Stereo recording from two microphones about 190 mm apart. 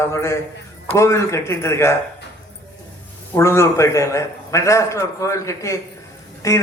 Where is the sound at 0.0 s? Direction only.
15° left (ahead or behind).